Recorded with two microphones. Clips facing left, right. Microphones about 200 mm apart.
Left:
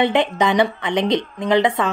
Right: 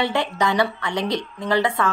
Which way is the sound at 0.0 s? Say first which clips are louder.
Left 5 dB; 20° left (ahead or behind).